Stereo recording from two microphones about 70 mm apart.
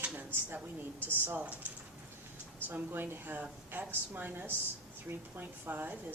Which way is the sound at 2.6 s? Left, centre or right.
Right.